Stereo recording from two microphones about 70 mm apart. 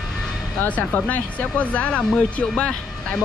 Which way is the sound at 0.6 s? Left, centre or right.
Left.